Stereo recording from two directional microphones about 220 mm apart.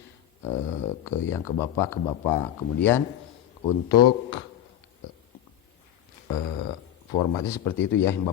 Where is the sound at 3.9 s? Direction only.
20° left (ahead or behind).